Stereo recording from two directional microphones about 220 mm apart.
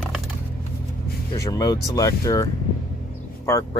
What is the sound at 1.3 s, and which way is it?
Speech, 15° left (ahead or behind).